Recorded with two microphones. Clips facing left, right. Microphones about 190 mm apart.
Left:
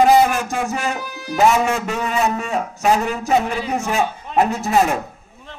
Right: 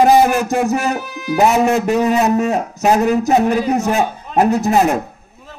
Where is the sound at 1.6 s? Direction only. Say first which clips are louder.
Right 8 dB; 40° right (ahead or behind).